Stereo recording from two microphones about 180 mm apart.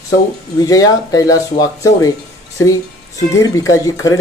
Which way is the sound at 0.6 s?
20° left (ahead or behind).